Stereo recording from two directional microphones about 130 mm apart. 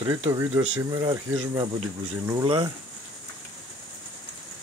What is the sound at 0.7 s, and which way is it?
Speech, 35° right (ahead or behind).